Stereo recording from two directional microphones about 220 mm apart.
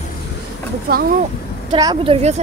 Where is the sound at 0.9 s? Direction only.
40° right (ahead or behind).